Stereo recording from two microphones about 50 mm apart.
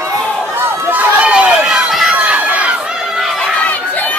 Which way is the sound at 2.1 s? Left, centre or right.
Right.